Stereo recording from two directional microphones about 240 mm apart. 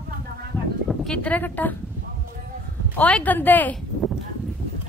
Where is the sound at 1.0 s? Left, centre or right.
Centre.